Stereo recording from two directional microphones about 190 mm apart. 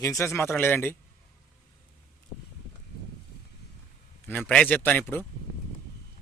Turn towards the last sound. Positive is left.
turn(degrees=10)  # may be behind; listen again after turning